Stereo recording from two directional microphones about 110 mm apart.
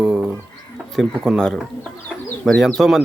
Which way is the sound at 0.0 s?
5° right (ahead or behind).